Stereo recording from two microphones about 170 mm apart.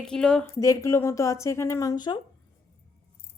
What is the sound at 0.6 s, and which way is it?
Speech, 15° left (ahead or behind).